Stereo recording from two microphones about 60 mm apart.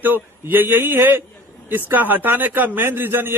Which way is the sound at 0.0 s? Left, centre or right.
Right.